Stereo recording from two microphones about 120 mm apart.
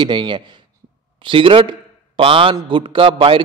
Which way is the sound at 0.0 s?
40° right (ahead or behind).